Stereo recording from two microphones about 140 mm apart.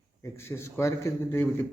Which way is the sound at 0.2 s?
20° left (ahead or behind).